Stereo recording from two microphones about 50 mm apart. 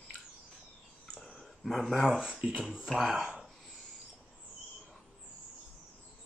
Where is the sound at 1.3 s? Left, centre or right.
Centre.